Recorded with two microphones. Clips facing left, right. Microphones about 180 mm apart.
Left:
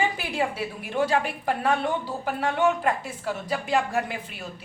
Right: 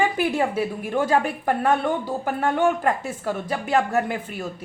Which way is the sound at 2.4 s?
45° right (ahead or behind).